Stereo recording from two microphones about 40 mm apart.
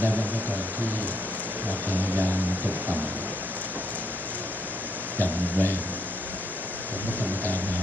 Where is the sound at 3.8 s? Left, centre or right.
Right.